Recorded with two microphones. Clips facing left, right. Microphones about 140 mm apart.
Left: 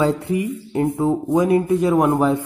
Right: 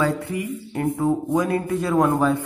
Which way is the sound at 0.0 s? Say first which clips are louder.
Left 4 dB; 20° left (ahead or behind).